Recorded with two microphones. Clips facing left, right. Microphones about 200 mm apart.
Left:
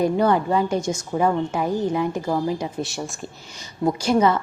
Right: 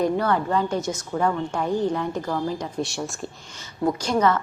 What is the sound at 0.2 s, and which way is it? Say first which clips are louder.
A woman's voice: left 3 dB; 15° left (ahead or behind).